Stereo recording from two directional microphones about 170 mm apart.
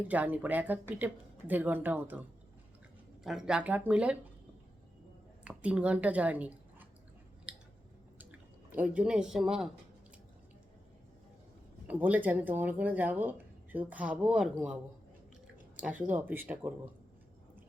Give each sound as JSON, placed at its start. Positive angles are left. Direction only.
{"t": 0.1, "sound": "a woman's voice", "side_deg": -10}
{"t": 3.2, "sound": "a woman's voice", "side_deg": -5}
{"t": 5.5, "sound": "a woman's voice", "side_deg": -5}
{"t": 8.7, "sound": "speech", "side_deg": -10}
{"t": 11.9, "sound": "a woman's voice", "side_deg": -10}
{"t": 15.8, "sound": "a woman's voice", "side_deg": -10}